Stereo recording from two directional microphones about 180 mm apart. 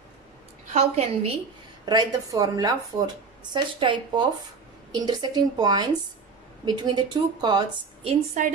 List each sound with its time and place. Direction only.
0.7 s a woman's voice: 35° right (ahead or behind)
1.9 s a woman's voice: 20° right (ahead or behind)